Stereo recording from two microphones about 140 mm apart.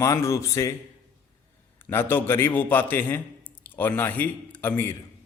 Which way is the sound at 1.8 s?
15° left (ahead or behind).